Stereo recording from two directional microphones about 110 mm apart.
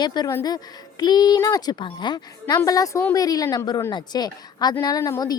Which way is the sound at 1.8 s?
45° left (ahead or behind).